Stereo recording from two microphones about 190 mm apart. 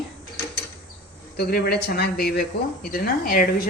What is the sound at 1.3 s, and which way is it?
Speech, 55° left (ahead or behind).